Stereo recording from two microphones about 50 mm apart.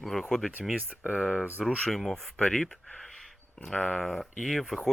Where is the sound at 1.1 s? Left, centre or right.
Right.